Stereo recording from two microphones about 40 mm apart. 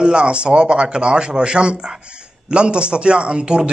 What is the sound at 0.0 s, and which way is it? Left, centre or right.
Speech, right.